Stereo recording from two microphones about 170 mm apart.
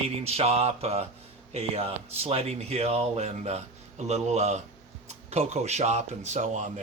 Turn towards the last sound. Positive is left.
turn(degrees=-45)  # may be behind; listen again after turning